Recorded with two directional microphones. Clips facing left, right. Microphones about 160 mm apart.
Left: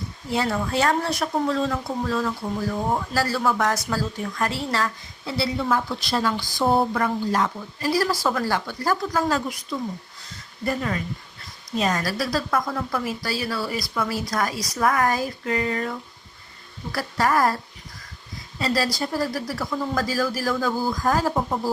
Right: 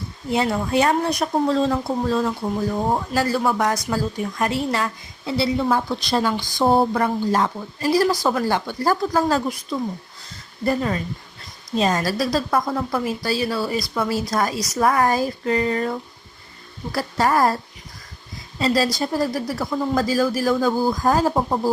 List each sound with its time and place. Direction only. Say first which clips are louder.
0.3 s a woman's voice: right 3 dB; 20° right (ahead or behind)
1.5 s a woman's voice: right 4 dB; 30° right (ahead or behind)
6.7 s a woman's voice: right 3 dB; 30° right (ahead or behind)
18.6 s a woman's voice: right 4 dB; 25° right (ahead or behind)